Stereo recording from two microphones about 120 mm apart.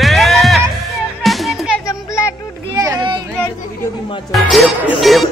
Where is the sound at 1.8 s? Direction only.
25° left (ahead or behind).